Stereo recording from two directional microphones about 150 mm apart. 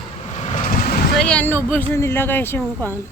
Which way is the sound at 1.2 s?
10° left (ahead or behind).